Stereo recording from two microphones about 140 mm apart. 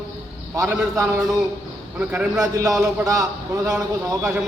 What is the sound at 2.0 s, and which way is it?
Speech, 10° right (ahead or behind).